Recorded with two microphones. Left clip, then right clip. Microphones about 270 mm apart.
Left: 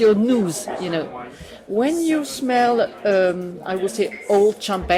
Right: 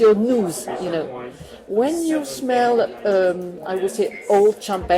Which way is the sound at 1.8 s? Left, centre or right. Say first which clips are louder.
Even; left.